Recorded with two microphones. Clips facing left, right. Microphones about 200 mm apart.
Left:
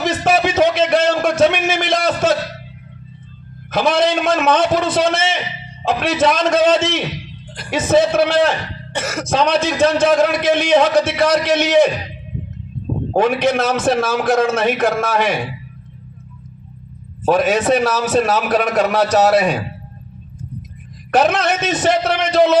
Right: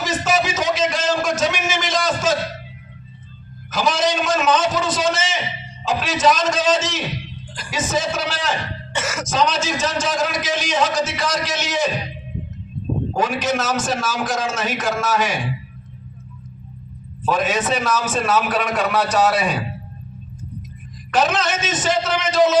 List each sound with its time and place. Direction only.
0.0 s a sound: 60° left (ahead or behind)
3.7 s speech: 60° left (ahead or behind)
13.1 s speech: 60° left (ahead or behind)
17.2 s a man's voice: 45° left (ahead or behind)
21.1 s speech: 60° left (ahead or behind)